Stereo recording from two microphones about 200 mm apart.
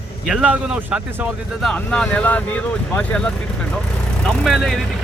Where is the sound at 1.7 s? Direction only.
5° left (ahead or behind).